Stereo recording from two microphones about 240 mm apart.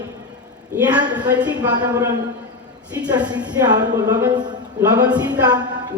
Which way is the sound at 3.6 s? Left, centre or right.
Centre.